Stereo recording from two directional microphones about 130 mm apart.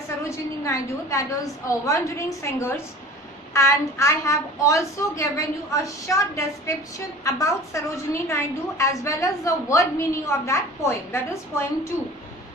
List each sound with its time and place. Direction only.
0.3 s a woman's voice: 25° left (ahead or behind)